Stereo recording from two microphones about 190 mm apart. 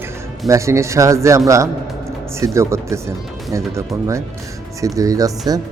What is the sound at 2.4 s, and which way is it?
Speech, 15° right (ahead or behind).